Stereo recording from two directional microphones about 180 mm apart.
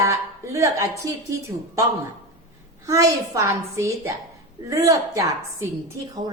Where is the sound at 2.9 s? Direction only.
20° right (ahead or behind).